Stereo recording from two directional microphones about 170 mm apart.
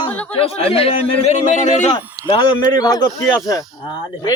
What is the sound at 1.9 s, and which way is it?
Speech, 25° left (ahead or behind).